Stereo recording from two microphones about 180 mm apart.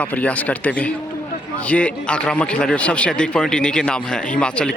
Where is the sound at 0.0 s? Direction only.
10° left (ahead or behind).